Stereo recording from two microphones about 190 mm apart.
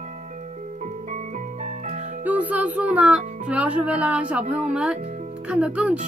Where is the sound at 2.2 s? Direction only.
10° right (ahead or behind).